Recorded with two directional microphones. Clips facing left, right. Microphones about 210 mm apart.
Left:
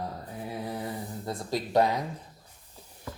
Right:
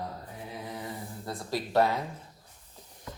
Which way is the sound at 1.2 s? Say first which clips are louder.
Left 1 dB; 20° left (ahead or behind).